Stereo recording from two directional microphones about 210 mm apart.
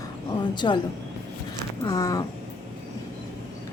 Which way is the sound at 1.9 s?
15° left (ahead or behind).